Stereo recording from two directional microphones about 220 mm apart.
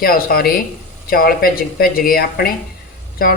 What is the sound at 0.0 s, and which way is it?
Speech, 45° left (ahead or behind).